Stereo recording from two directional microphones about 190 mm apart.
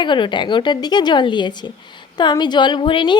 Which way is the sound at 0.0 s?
25° left (ahead or behind).